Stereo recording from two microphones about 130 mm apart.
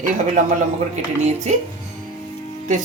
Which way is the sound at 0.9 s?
65° right (ahead or behind).